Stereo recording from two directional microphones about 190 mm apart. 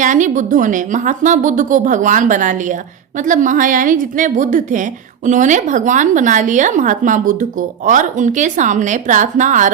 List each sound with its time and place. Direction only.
0.0 s a woman's voice: 40° right (ahead or behind)